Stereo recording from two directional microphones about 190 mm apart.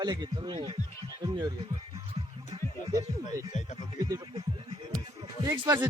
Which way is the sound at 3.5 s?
40° left (ahead or behind).